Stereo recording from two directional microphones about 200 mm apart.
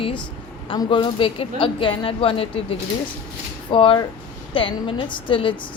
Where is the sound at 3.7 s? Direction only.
25° left (ahead or behind).